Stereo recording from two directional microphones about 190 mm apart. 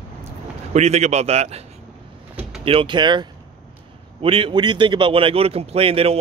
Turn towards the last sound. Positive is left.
turn(degrees=-30)  # may be behind; listen again after turning